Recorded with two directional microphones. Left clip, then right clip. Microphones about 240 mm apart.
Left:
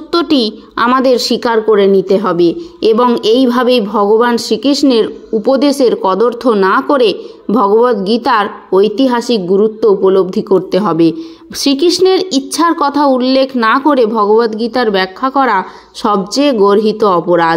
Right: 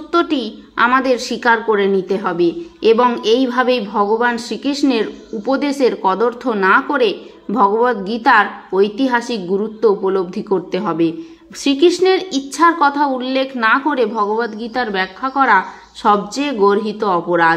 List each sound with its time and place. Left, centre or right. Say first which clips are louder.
0.1 s a woman's voice: left 5 dB; left